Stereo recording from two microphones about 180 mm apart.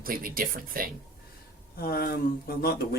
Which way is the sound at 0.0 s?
50° right (ahead or behind).